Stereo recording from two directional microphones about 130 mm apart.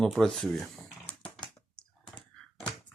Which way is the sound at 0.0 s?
5° left (ahead or behind).